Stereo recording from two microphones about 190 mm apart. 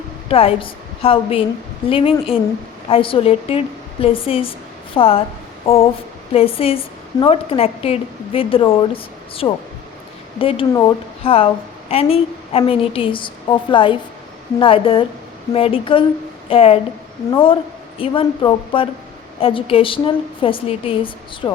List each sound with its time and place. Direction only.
0.3 s a woman's voice: 30° left (ahead or behind)
5.6 s a sound: 30° left (ahead or behind)
6.3 s a woman's voice: 30° left (ahead or behind)